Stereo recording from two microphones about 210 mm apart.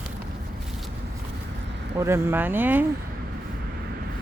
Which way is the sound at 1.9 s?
10° right (ahead or behind).